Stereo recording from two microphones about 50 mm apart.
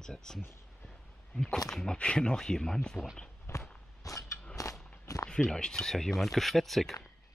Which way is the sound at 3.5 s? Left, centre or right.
Left.